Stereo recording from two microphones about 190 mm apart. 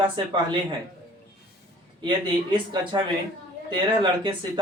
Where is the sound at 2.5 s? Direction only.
25° right (ahead or behind).